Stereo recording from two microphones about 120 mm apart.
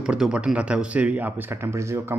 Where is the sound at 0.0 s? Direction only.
5° right (ahead or behind).